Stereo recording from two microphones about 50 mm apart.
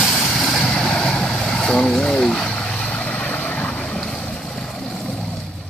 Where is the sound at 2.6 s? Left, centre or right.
Centre.